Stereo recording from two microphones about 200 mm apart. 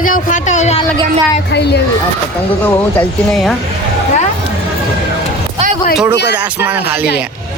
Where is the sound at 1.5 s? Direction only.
60° left (ahead or behind).